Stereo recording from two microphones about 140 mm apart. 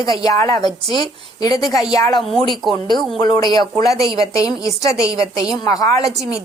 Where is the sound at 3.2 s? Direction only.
30° left (ahead or behind).